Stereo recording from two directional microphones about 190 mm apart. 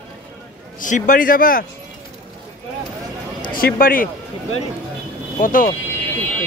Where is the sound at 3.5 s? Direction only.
50° left (ahead or behind).